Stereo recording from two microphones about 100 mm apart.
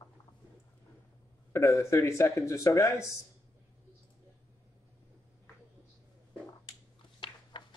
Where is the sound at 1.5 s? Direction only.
30° left (ahead or behind).